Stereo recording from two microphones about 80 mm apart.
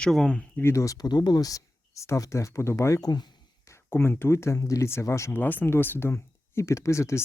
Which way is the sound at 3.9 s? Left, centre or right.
Left.